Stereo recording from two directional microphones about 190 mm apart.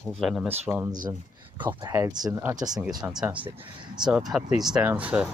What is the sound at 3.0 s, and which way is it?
Speech, 5° right (ahead or behind).